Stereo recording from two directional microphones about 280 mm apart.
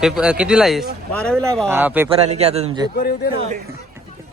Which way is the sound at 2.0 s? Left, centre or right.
Right.